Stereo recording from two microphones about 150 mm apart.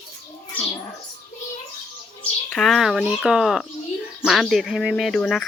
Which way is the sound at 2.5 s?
Centre (ahead or behind).